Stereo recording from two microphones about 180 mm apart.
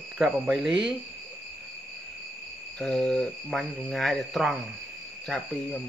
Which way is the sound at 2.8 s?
5° left (ahead or behind).